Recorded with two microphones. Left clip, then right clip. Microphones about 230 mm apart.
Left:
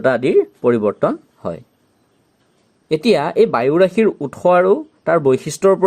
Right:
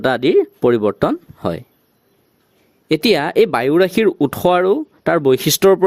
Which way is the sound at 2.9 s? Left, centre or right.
Right.